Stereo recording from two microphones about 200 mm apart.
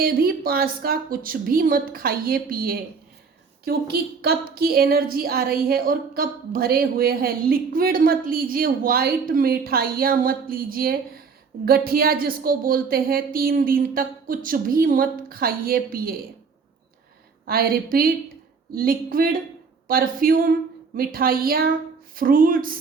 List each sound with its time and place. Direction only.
0.0 s a woman's voice: 45° right (ahead or behind)
17.4 s a woman's voice: 45° right (ahead or behind)